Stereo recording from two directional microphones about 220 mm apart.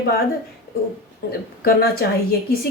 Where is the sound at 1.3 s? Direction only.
45° left (ahead or behind).